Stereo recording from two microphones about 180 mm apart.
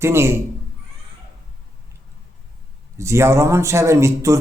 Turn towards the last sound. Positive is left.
turn(degrees=-15)  # may be behind; listen again after turning